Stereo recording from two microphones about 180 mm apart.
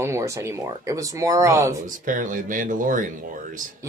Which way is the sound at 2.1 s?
45° right (ahead or behind).